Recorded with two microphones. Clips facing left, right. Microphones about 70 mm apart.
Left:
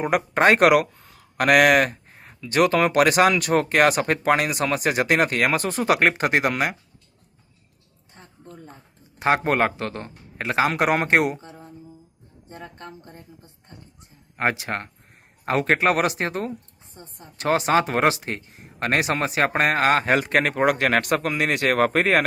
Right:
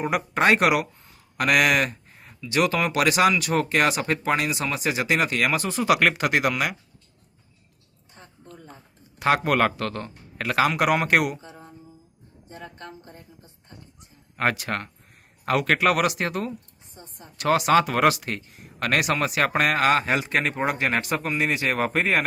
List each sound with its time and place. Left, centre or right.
0.0 s speech: left
9.1 s a man's voice: left
10.7 s speech: left
14.3 s speech: left